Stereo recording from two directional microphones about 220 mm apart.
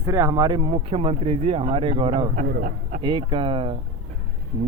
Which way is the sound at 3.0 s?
20° right (ahead or behind).